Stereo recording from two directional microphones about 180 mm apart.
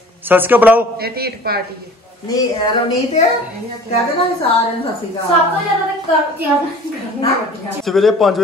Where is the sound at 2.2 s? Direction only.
20° left (ahead or behind).